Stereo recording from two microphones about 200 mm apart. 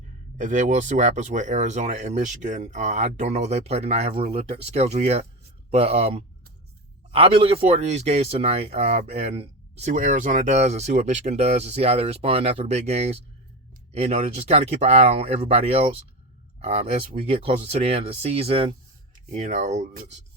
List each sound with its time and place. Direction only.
0.3 s speech: 40° right (ahead or behind)